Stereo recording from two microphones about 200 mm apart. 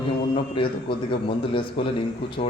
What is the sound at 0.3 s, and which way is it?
A man's voice, 25° left (ahead or behind).